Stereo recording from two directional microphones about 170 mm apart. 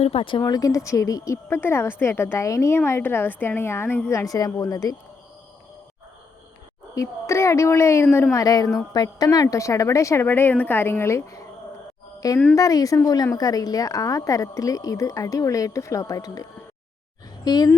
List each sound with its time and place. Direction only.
0.0 s speech: 35° left (ahead or behind)
6.9 s a woman's voice: 20° left (ahead or behind)